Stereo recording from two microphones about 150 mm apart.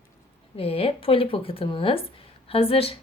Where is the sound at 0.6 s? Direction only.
40° left (ahead or behind).